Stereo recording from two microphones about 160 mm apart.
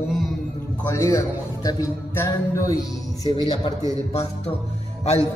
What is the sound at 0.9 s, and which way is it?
Speech, 20° left (ahead or behind).